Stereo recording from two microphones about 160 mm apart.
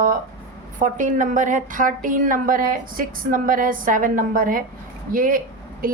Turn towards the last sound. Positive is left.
turn(degrees=-60)  # may be behind; listen again after turning